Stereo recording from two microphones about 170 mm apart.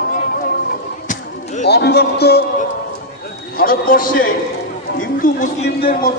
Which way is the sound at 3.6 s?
55° left (ahead or behind).